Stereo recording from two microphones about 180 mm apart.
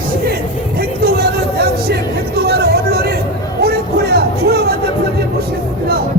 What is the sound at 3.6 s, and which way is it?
Music, 60° right (ahead or behind).